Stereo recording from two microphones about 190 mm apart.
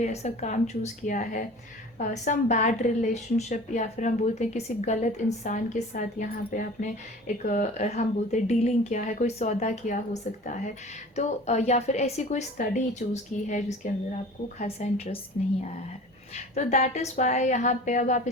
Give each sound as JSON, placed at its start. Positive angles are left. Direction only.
{"t": 0.0, "sound": "a woman's voice", "side_deg": 35}
{"t": 16.3, "sound": "a woman's voice", "side_deg": 35}